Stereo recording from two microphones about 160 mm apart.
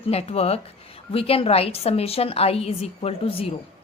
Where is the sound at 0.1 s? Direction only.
40° left (ahead or behind).